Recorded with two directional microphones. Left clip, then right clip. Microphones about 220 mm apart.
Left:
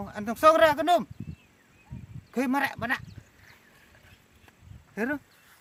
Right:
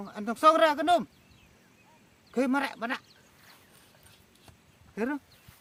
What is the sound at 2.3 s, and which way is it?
Speech, 55° left (ahead or behind).